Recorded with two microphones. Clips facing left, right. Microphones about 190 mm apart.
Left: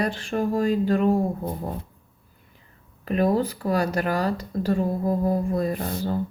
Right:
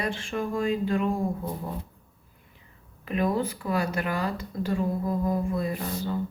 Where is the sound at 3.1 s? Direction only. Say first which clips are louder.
Left 4 dB; 40° left (ahead or behind).